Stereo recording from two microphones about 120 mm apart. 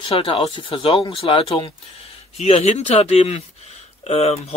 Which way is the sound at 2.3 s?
60° left (ahead or behind).